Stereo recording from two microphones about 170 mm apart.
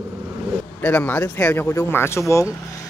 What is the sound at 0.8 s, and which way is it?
A man's voice, 10° left (ahead or behind).